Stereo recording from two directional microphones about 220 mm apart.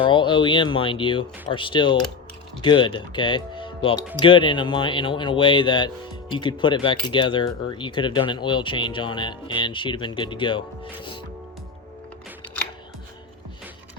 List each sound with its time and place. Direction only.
0.0 s speech: 20° left (ahead or behind)